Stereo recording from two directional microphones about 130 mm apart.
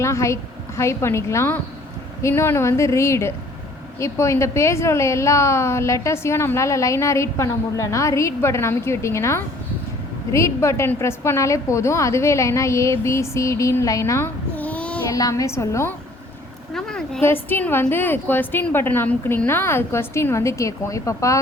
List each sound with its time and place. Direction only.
0.0 s a woman's voice: 20° left (ahead or behind)
15.1 s a woman's voice: 25° left (ahead or behind)
16.7 s a woman's voice: 5° left (ahead or behind); by 21.3 s 25° left (ahead or behind)